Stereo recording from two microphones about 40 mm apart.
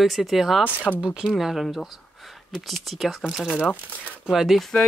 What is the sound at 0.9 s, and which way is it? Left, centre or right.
Speech, left.